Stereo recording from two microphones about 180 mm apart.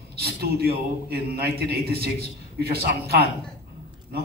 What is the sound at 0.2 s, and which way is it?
A man's voice, 60° right (ahead or behind).